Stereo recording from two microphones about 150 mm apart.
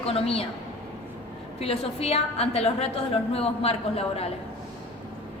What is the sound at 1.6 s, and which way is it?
A woman's voice, 40° left (ahead or behind).